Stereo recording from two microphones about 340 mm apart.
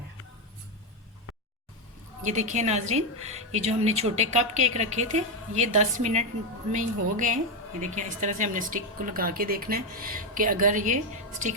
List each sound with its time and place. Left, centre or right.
2.2 s a woman's voice: right